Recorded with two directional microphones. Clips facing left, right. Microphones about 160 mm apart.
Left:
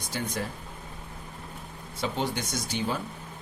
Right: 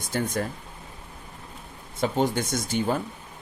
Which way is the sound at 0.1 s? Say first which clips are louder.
Right 6 dB; 50° right (ahead or behind).